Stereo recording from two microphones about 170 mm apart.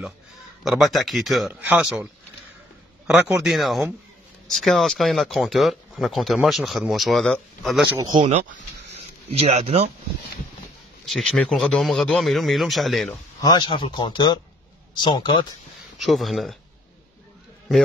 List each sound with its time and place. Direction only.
0.7 s speech: centre (ahead or behind)
3.1 s speech: 10° right (ahead or behind)
3.4 s speech: centre (ahead or behind)
8.2 s speech: 40° right (ahead or behind)
11.1 s speech: centre (ahead or behind)
13.4 s speech: 25° left (ahead or behind)
16.0 s speech: centre (ahead or behind)